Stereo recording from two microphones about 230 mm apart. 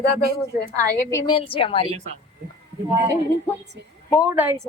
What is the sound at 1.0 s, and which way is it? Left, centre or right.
Speech, centre.